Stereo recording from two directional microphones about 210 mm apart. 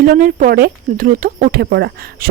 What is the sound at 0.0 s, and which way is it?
Speech, 40° right (ahead or behind).